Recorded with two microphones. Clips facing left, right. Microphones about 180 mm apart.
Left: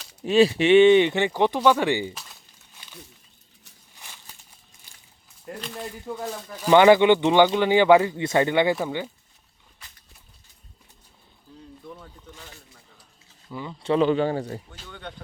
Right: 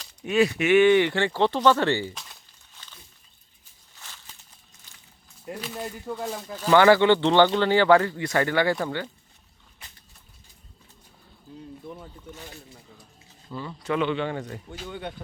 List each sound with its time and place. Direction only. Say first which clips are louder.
0.3 s speech: left 4 dB; 30° left (ahead or behind)
2.8 s a sound: left 9 dB; 10° left (ahead or behind)
5.5 s speech: right 1 dB; 5° right (ahead or behind)
6.6 s speech: left 2 dB; 15° left (ahead or behind)
11.9 s a sound: even; 20° right (ahead or behind)
13.5 s speech: left 1 dB; 15° left (ahead or behind)
13.8 s a man's voice: left 5 dB; 35° left (ahead or behind)
14.7 s speech: right 5 dB; 15° right (ahead or behind)